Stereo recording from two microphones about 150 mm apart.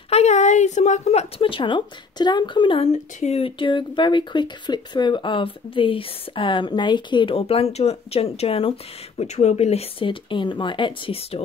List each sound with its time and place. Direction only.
0.1 s a woman's voice: 50° left (ahead or behind); by 2.8 s 30° left (ahead or behind)
2.8 s speech: 50° left (ahead or behind)